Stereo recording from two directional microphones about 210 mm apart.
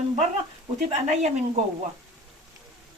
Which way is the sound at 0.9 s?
30° right (ahead or behind).